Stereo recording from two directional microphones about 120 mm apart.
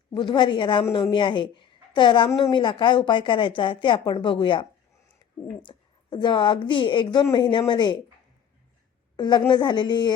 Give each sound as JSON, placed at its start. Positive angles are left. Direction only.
{"t": 0.2, "sound": "a woman's voice", "side_deg": 40}
{"t": 9.1, "sound": "a woman's voice", "side_deg": 40}